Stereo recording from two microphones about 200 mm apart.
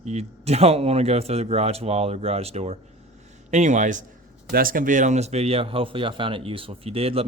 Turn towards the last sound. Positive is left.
turn(degrees=-30)  # may be behind; listen again after turning